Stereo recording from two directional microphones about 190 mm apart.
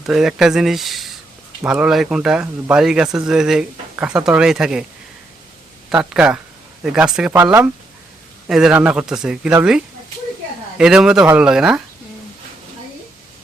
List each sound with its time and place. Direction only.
0.0 s speech: centre (ahead or behind)
5.9 s speech: 5° right (ahead or behind)
10.8 s speech: 5° right (ahead or behind)